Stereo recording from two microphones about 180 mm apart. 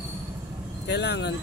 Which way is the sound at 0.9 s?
70° left (ahead or behind).